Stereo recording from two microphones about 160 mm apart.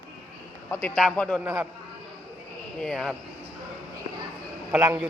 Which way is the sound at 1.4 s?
15° right (ahead or behind).